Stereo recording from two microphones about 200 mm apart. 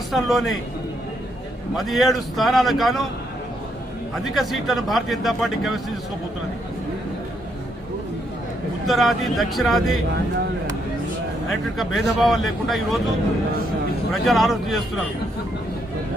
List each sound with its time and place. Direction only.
0.1 s speech: centre (ahead or behind)
1.7 s speech: centre (ahead or behind)
4.2 s speech: centre (ahead or behind)
8.9 s speech: centre (ahead or behind)
11.9 s speech: centre (ahead or behind)
14.1 s speech: centre (ahead or behind)